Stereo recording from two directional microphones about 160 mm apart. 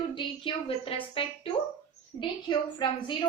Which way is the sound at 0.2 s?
30° left (ahead or behind).